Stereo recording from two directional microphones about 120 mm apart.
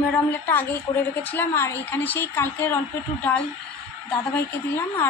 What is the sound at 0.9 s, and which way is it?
Speech, 35° left (ahead or behind).